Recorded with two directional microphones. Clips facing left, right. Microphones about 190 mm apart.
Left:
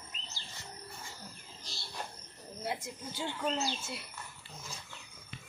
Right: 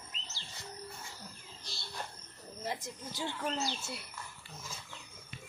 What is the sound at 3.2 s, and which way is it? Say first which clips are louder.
Speech: left 2 dB; 10° left (ahead or behind).